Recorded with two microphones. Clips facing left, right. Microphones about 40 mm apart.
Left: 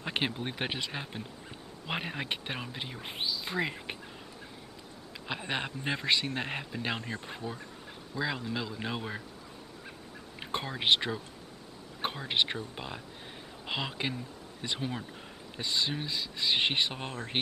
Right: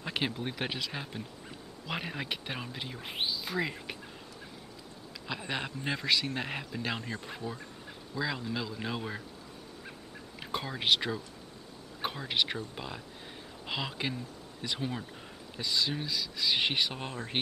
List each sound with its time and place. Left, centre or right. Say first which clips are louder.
0.0 s speech: left 1 dB; centre
5.2 s speech: left 1 dB; centre
10.4 s speech: left 1 dB; centre
15.6 s speech: even; left
16.9 s speech: even; centre